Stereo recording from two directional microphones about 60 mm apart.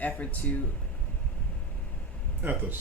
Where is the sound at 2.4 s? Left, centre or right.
Right.